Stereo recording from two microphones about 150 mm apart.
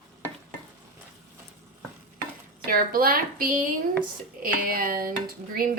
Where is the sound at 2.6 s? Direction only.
75° right (ahead or behind).